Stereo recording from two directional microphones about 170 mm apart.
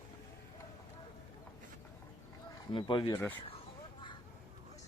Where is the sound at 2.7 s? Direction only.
30° left (ahead or behind).